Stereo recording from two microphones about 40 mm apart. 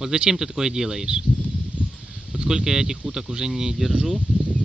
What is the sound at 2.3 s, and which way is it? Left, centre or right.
Speech, centre.